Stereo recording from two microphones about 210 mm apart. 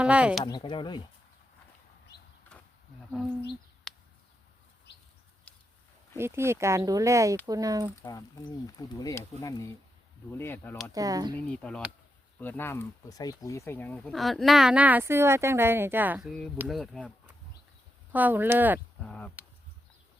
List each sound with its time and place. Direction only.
0.0 s speech: 5° right (ahead or behind)
0.4 s speech: 20° left (ahead or behind)
2.5 s a sound: 5° left (ahead or behind)
3.9 s a sound: centre (ahead or behind)
4.9 s bird: 55° left (ahead or behind)
6.1 s speech: 10° right (ahead or behind)
8.0 s speech: 20° left (ahead or behind)
10.9 s speech: 15° right (ahead or behind)
11.4 s speech: 5° left (ahead or behind)
18.1 s speech: 10° right (ahead or behind)
19.0 s speech: 5° left (ahead or behind)